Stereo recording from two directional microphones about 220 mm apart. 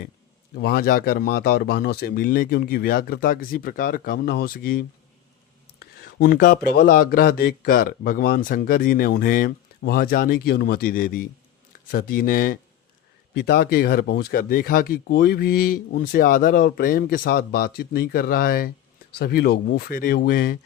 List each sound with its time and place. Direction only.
0.5 s speech: 45° left (ahead or behind)